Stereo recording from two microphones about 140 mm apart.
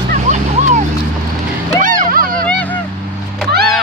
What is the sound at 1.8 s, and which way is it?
Music, 75° right (ahead or behind).